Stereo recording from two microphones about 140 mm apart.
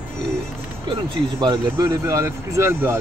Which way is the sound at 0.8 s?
35° right (ahead or behind).